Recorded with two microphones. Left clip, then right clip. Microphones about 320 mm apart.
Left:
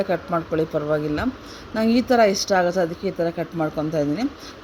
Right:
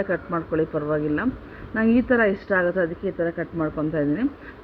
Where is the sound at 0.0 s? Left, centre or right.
Centre.